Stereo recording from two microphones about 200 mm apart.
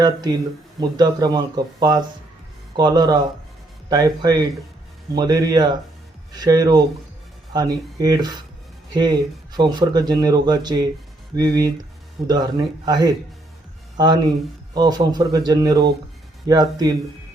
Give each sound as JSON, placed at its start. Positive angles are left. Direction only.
{"t": 0.0, "sound": "speech", "side_deg": -20}
{"t": 7.9, "sound": "speech", "side_deg": -20}